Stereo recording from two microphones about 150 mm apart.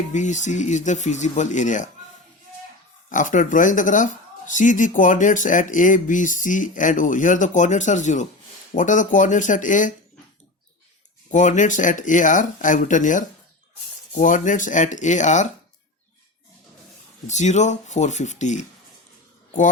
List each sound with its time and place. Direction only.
0.1 s speech: 55° left (ahead or behind)
3.1 s speech: 60° left (ahead or behind)
11.3 s speech: 55° left (ahead or behind)
17.2 s speech: 50° left (ahead or behind)